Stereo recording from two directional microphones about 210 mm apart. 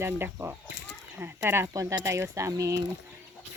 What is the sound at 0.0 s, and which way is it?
Speech, 10° right (ahead or behind).